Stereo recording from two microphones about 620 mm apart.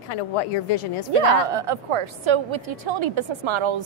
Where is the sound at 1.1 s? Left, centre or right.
Right.